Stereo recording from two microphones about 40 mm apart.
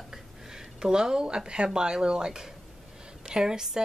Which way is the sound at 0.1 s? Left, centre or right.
Centre.